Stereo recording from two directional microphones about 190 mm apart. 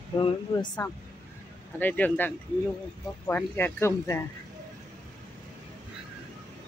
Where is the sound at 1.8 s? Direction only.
10° left (ahead or behind).